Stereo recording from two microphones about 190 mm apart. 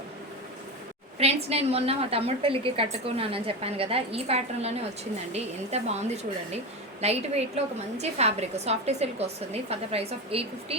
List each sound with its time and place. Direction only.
1.2 s a woman's voice: 35° right (ahead or behind)
7.0 s a woman's voice: 35° right (ahead or behind)